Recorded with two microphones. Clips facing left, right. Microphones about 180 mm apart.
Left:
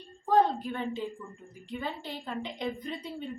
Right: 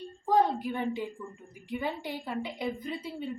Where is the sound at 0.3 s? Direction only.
10° right (ahead or behind).